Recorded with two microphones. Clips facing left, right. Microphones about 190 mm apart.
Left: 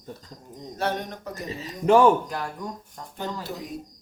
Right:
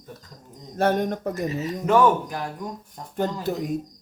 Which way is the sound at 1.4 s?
30° left (ahead or behind).